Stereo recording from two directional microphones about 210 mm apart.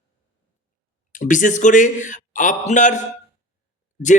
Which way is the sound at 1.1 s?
40° left (ahead or behind).